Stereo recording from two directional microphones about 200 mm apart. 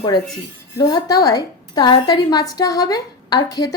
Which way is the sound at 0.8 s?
20° left (ahead or behind).